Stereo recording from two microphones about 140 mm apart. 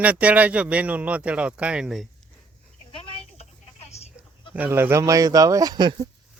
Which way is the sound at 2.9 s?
40° left (ahead or behind).